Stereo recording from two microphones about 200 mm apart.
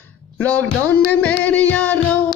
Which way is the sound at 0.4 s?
5° left (ahead or behind).